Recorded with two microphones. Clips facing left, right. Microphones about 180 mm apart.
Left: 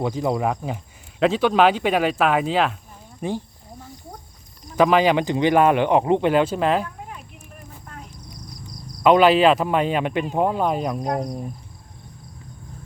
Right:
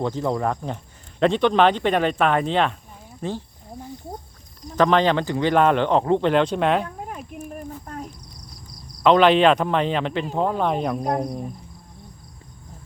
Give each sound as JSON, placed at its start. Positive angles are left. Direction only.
{"t": 0.0, "sound": "speech", "side_deg": 10}
{"t": 4.8, "sound": "speech", "side_deg": 10}
{"t": 6.8, "sound": "a sound", "side_deg": -45}
{"t": 9.0, "sound": "speech", "side_deg": 10}